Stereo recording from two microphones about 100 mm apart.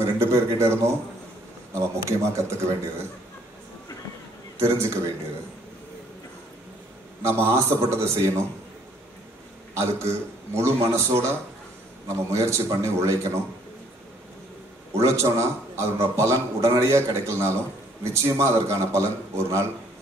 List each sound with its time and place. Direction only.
0.0 s a man's voice: 25° right (ahead or behind)
4.6 s a man's voice: 30° right (ahead or behind)
7.2 s a man's voice: 25° right (ahead or behind)
9.8 s a man's voice: 25° right (ahead or behind)
15.0 s a man's voice: 30° right (ahead or behind)